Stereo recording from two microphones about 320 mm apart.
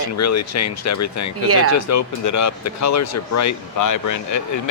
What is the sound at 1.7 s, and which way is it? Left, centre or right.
Speech, left.